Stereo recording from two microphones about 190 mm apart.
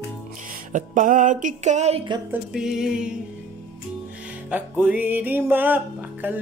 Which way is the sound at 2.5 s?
5° right (ahead or behind).